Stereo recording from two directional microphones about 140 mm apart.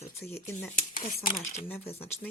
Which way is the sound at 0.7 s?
75° left (ahead or behind).